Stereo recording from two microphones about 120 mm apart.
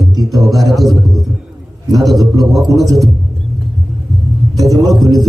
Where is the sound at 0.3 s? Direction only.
Centre (ahead or behind).